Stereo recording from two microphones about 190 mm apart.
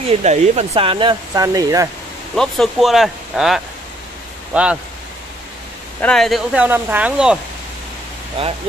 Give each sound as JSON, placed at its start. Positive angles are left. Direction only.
{"t": 0.1, "sound": "speech", "side_deg": -35}
{"t": 2.3, "sound": "speech", "side_deg": 0}
{"t": 5.9, "sound": "speech", "side_deg": 5}